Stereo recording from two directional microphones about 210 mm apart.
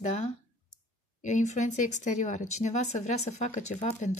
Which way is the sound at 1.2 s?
35° left (ahead or behind).